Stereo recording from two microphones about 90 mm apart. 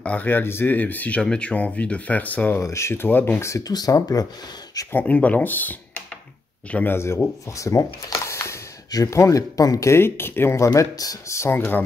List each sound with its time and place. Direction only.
0.0 s speech: 15° left (ahead or behind)
2.6 s speech: 30° left (ahead or behind)
4.9 s speech: 15° left (ahead or behind)
10.7 s speech: 45° left (ahead or behind)